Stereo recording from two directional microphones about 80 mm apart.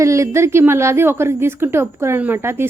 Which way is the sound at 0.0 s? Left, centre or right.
Right.